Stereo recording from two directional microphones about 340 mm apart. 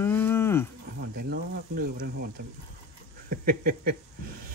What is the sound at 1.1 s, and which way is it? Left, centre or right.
Speech, right.